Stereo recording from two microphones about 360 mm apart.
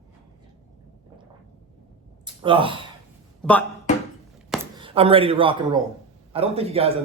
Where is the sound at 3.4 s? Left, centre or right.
Centre.